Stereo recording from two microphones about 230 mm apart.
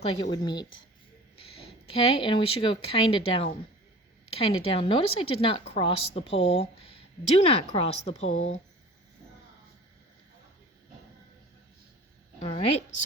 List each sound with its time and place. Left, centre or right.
0.0 s a woman's voice: left
1.9 s a woman's voice: left
12.4 s a woman's voice: left